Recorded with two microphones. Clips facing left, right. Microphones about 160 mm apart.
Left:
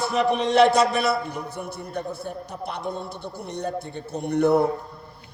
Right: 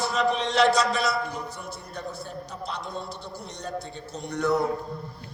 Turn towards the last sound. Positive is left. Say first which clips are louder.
# left 6 dB
turn(degrees=55)  # may be behind; listen again after turning